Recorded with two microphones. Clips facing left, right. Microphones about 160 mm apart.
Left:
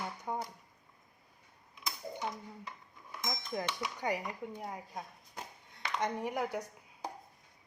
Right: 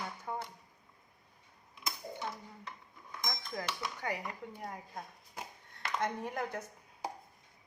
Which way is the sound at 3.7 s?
15° left (ahead or behind).